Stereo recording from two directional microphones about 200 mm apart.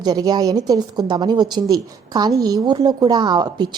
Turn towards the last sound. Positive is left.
turn(degrees=-20)  # may be behind; listen again after turning